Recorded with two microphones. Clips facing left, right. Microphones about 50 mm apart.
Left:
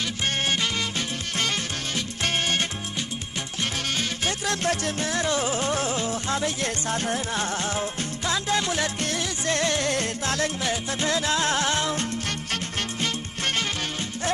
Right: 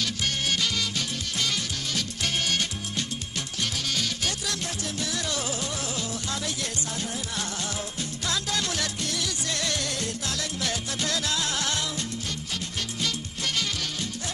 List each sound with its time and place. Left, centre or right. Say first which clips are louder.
0.3 s music: left 4 dB; left
7.3 s music: left 6 dB; left
9.0 s music: left 3 dB; left
10.6 s music: left 3 dB; left